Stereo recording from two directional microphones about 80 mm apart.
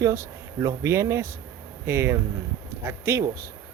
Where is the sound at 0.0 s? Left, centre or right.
Right.